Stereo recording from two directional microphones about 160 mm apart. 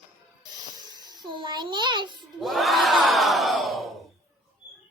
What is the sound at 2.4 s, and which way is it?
Crowd, centre (ahead or behind).